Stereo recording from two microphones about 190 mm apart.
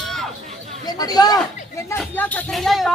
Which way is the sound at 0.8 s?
20° left (ahead or behind).